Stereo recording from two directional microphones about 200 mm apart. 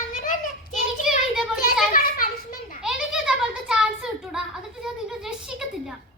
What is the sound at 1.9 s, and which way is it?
Children playing, 45° left (ahead or behind).